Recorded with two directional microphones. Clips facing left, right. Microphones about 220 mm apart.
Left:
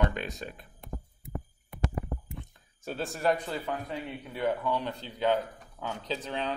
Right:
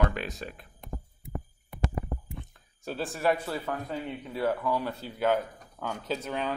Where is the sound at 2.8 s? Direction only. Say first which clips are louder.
Right 1 dB; centre (ahead or behind).